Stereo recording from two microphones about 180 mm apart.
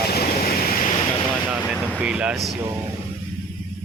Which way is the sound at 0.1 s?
55° left (ahead or behind).